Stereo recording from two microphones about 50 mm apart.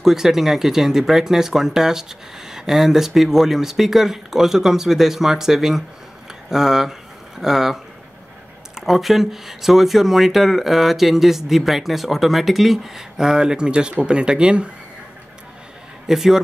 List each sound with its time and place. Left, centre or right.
0.0 s speech: centre
16.1 s speech: centre